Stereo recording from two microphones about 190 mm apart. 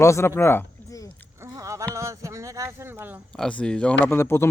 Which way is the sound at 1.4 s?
15° right (ahead or behind).